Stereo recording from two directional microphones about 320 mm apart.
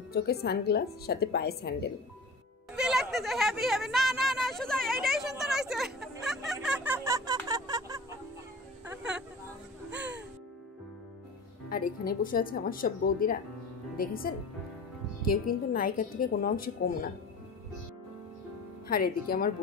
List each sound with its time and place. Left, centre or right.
0.1 s a woman's voice: left
2.7 s speech: centre
9.8 s music: centre
11.7 s a woman's voice: left
18.9 s a woman's voice: left